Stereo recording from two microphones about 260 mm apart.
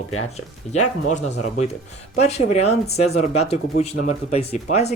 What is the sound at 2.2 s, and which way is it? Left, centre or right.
Speech, left.